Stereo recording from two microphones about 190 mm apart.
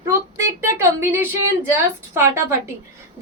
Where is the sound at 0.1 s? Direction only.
15° right (ahead or behind).